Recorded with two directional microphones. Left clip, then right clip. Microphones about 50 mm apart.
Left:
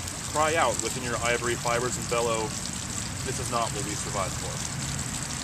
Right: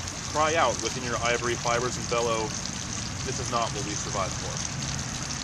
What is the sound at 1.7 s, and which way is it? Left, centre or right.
Speech, centre.